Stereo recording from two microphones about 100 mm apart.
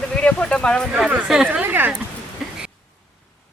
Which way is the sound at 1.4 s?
20° right (ahead or behind).